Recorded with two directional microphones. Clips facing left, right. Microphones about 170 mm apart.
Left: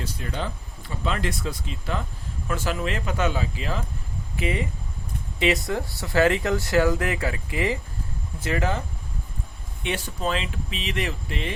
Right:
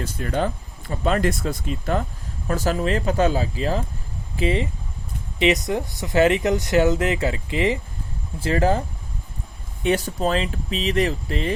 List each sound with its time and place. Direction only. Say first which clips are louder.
0.0 s speech: right 7 dB; 50° right (ahead or behind); by 7.8 s 20° right (ahead or behind)
8.4 s speech: right 6 dB; 30° right (ahead or behind)
9.8 s speech: right 7 dB; 40° right (ahead or behind)